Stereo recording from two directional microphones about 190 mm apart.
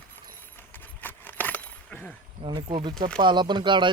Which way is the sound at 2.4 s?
25° right (ahead or behind).